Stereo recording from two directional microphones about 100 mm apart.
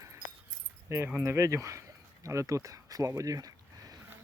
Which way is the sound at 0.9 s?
30° right (ahead or behind).